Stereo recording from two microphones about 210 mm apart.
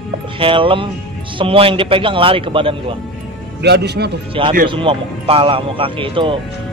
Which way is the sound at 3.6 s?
50° right (ahead or behind).